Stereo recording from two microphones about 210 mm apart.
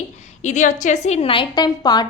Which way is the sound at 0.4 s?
35° left (ahead or behind).